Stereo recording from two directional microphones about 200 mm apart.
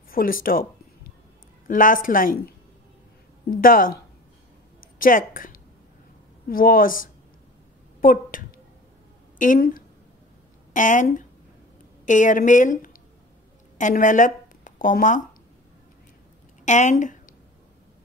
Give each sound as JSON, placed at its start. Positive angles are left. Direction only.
{"t": 0.1, "sound": "a woman's voice", "side_deg": 45}
{"t": 1.7, "sound": "a woman's voice", "side_deg": 40}
{"t": 16.6, "sound": "speech", "side_deg": 35}